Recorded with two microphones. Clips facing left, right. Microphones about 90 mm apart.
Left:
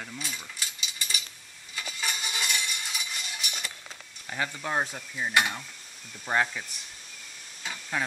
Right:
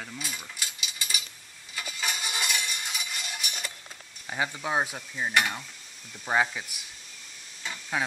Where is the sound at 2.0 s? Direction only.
15° right (ahead or behind).